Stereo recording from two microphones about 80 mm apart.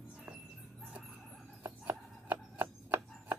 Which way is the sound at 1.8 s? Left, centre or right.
Right.